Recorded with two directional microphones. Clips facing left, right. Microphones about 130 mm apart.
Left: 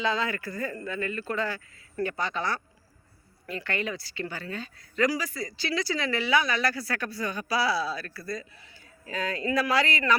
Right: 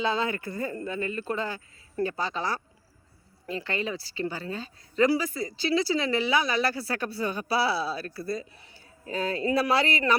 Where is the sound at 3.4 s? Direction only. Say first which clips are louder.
Right 1 dB; 30° right (ahead or behind).